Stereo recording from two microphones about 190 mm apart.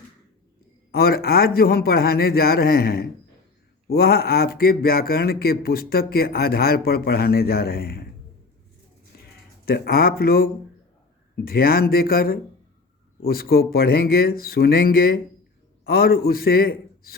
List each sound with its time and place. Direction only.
0.9 s speech: 55° left (ahead or behind)
9.6 s a man's voice: 55° left (ahead or behind)